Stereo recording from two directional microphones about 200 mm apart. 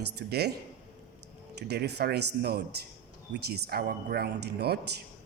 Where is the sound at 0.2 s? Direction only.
55° right (ahead or behind).